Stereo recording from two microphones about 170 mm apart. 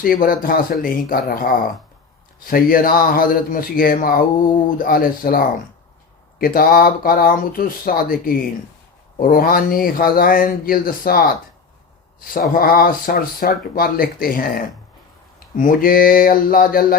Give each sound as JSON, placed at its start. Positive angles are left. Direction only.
{"t": 0.0, "sound": "speech", "side_deg": 55}
{"t": 12.3, "sound": "speech", "side_deg": 60}